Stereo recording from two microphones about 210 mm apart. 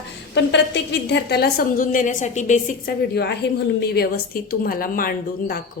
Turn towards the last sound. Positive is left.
turn(degrees=45)  # may be behind; listen again after turning